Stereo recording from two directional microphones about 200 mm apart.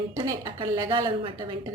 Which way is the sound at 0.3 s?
20° right (ahead or behind).